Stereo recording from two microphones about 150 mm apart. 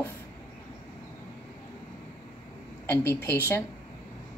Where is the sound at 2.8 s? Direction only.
10° left (ahead or behind).